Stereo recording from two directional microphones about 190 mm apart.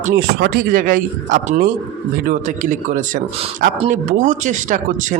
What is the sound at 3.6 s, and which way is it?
Speech, 40° right (ahead or behind).